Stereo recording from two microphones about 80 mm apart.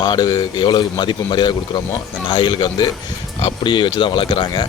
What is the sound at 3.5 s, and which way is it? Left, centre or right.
Speech, left.